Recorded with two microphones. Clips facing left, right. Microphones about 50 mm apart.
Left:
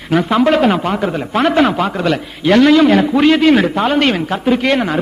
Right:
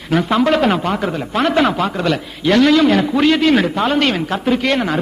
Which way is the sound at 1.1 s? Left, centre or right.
Centre.